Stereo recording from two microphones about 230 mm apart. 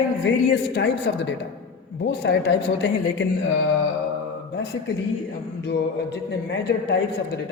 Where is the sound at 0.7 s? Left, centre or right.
Left.